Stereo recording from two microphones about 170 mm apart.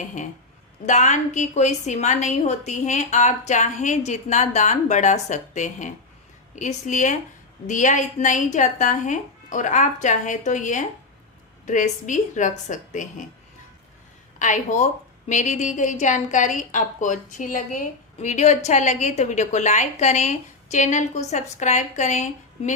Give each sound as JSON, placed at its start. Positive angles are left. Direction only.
{"t": 0.0, "sound": "a woman's voice", "side_deg": 45}
{"t": 14.3, "sound": "a woman's voice", "side_deg": 45}